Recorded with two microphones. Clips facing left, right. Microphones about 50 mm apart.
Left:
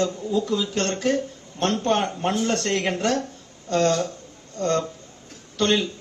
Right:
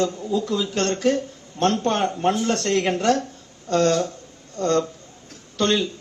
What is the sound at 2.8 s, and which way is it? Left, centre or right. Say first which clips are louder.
Speech: right 3 dB; right.